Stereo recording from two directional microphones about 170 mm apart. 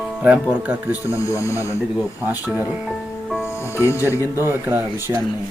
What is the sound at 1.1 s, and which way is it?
Speech, 20° left (ahead or behind).